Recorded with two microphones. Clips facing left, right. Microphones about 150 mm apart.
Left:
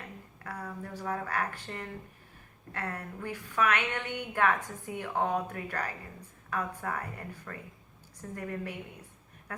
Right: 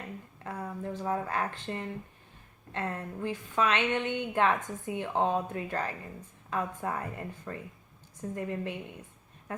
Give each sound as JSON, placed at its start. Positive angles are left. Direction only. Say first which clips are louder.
{"t": 0.4, "sound": "a woman's voice", "louder": "right 4 dB", "side_deg": -20}